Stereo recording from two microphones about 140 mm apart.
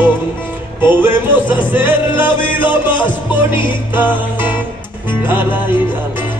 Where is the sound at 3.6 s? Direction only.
35° left (ahead or behind).